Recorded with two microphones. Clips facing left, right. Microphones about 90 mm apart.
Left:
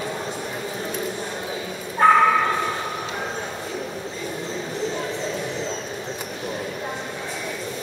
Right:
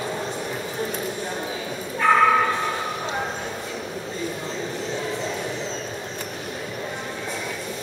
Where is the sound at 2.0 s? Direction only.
40° left (ahead or behind).